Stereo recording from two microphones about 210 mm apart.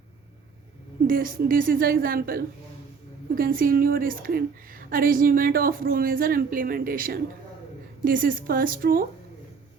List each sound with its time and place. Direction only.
1.0 s a woman's voice: 40° right (ahead or behind)